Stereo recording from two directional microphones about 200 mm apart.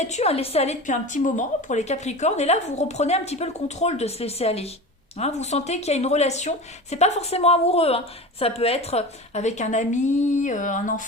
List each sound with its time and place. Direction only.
0.1 s a woman's voice: 30° left (ahead or behind)